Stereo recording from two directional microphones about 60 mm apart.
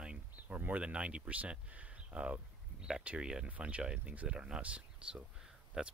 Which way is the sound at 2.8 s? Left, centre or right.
Centre.